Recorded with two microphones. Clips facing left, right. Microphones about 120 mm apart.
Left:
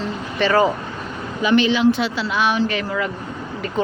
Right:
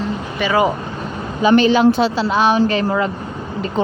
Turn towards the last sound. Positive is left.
turn(degrees=-30)  # may be behind; listen again after turning